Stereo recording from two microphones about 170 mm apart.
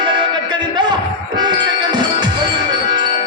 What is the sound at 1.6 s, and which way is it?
Music, 25° right (ahead or behind).